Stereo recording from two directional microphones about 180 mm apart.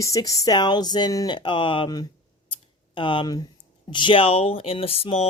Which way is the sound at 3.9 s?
25° left (ahead or behind).